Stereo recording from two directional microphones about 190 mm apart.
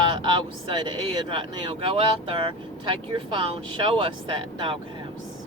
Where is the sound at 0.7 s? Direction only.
25° right (ahead or behind).